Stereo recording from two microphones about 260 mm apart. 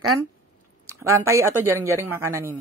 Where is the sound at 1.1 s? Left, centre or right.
Centre.